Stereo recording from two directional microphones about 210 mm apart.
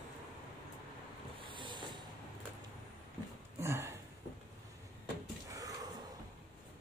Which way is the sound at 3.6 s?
10° right (ahead or behind).